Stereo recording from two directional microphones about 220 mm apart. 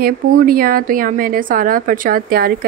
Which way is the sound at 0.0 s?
40° right (ahead or behind).